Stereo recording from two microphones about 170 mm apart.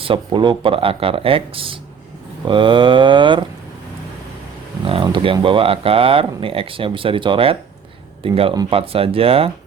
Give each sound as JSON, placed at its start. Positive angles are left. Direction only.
{"t": 0.0, "sound": "speech", "side_deg": -30}
{"t": 2.4, "sound": "a sound", "side_deg": -30}
{"t": 4.9, "sound": "speech", "side_deg": -30}